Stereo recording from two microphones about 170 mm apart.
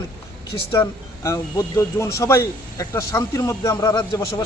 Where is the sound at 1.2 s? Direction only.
20° left (ahead or behind).